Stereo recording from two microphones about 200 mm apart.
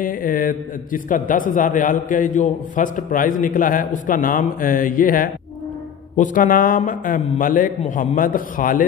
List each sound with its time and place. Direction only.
0.0 s a man's voice: 45° left (ahead or behind)